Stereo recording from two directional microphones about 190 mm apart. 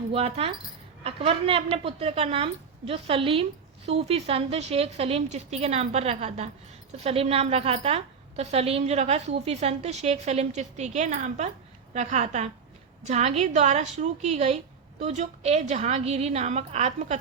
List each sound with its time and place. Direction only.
0.1 s a woman's voice: 30° right (ahead or behind)